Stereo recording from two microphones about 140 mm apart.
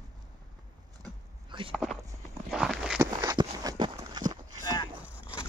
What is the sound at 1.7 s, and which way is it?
Walk, 5° right (ahead or behind).